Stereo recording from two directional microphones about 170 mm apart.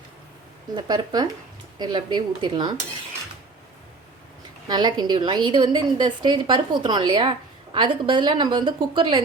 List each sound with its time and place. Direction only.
0.8 s a woman's voice: 25° right (ahead or behind)
4.7 s a woman's voice: 25° right (ahead or behind)